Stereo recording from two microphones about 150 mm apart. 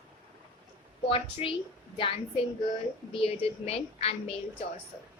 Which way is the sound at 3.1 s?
40° left (ahead or behind).